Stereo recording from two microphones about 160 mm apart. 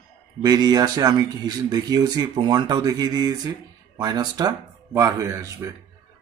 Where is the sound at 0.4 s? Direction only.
25° right (ahead or behind).